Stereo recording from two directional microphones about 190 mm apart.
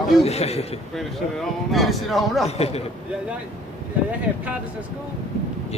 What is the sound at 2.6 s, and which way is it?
Speech, 35° left (ahead or behind).